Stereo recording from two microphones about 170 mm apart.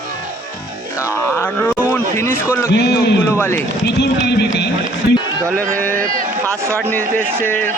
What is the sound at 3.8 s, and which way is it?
Speech, 80° left.